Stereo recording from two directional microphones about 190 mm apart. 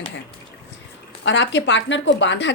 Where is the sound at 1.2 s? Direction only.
70° left (ahead or behind).